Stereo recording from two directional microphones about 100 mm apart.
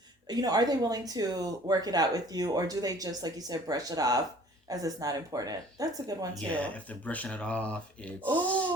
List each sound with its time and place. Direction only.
0.3 s speech: 40° right (ahead or behind)
6.5 s speech: 15° left (ahead or behind)